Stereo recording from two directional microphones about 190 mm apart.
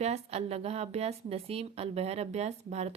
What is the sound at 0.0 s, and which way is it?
A woman's voice, 35° right (ahead or behind).